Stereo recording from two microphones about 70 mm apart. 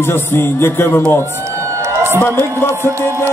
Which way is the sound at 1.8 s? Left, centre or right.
Right.